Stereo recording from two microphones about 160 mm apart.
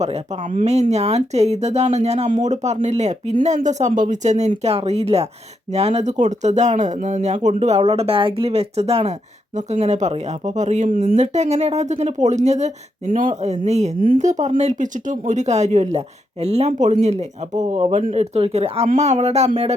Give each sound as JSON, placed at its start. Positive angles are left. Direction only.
{"t": 0.0, "sound": "speech", "side_deg": -45}